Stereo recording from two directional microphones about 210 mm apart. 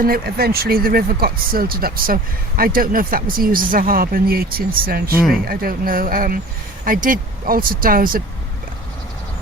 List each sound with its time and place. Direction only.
0.0 s speech: 45° right (ahead or behind)